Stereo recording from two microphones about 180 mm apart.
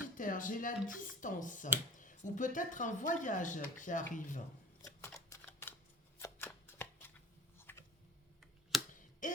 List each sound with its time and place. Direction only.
0.0 s speech: 45° left (ahead or behind)
4.9 s a sound: 10° left (ahead or behind)
6.1 s shuffling cards: 10° left (ahead or behind)
7.6 s typing: 15° left (ahead or behind)
8.7 s finger snapping: centre (ahead or behind)
9.2 s a sound: 45° left (ahead or behind)